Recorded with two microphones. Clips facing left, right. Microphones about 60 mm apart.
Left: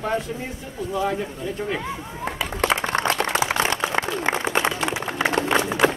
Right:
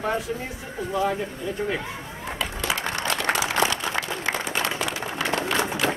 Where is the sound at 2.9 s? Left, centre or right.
Left.